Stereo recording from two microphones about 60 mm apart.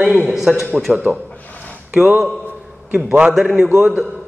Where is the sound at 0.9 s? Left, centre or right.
Right.